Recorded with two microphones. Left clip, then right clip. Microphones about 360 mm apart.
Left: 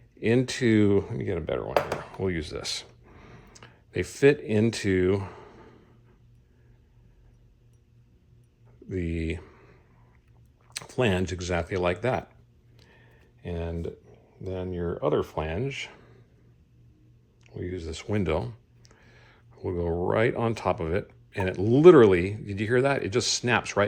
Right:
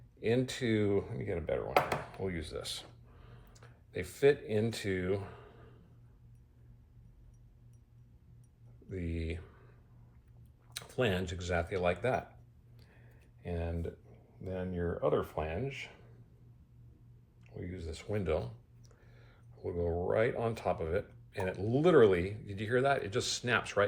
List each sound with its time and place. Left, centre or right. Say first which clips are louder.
0.2 s speech: left 8 dB; left
8.9 s speech: left 9 dB; left
10.8 s speech: left 7 dB; centre
12.7 s tick: left 8 dB; left
13.4 s speech: left 6 dB; left
17.4 s speech: left 10 dB; left
18.9 s a sound: left 9 dB; left
19.8 s speech: left 6 dB; left